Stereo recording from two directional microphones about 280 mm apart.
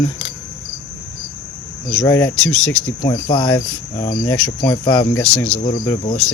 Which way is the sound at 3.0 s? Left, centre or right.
Centre.